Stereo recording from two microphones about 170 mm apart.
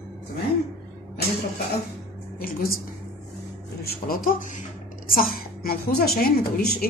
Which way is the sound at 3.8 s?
60° left (ahead or behind).